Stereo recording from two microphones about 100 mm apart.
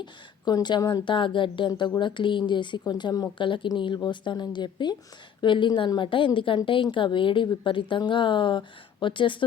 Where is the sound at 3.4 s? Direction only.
55° left (ahead or behind).